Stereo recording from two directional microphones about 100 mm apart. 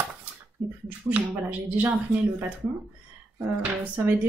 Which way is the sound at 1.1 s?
15° right (ahead or behind).